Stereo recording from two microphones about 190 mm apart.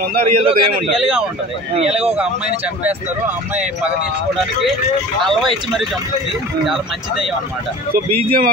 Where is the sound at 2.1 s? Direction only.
5° right (ahead or behind).